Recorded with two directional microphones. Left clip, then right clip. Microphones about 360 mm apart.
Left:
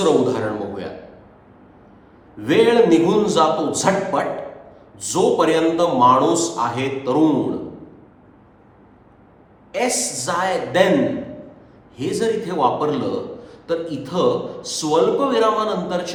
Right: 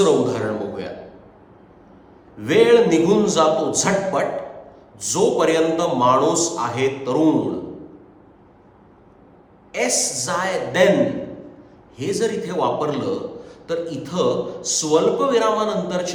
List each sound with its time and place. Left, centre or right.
0.0 s a man's voice: centre
2.4 s a man's voice: centre
9.7 s a man's voice: centre
11.9 s a man's voice: centre